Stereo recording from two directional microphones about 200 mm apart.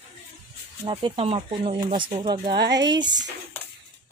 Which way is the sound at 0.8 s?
25° right (ahead or behind).